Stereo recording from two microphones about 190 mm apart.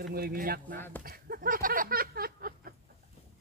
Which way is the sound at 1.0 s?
50° right (ahead or behind).